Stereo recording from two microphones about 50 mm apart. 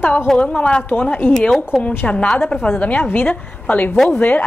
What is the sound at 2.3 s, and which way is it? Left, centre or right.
A woman's voice, left.